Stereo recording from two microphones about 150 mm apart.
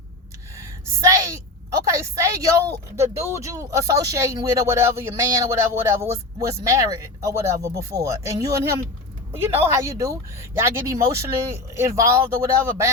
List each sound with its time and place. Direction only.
1.0 s speech: 20° right (ahead or behind)